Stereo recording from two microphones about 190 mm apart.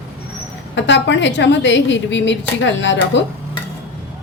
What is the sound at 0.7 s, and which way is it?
A woman's voice, 70° left (ahead or behind).